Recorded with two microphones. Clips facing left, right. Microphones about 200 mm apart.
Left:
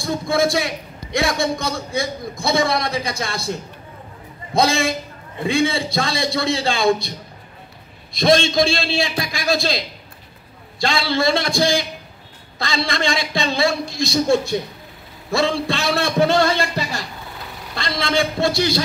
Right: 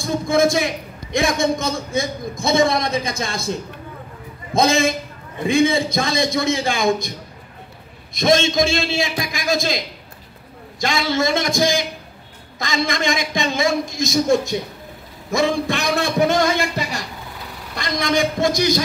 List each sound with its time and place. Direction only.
0.0 s a man's voice: 20° right (ahead or behind)
4.6 s a man's voice: 20° right (ahead or behind)
8.2 s a man's voice: 20° right (ahead or behind)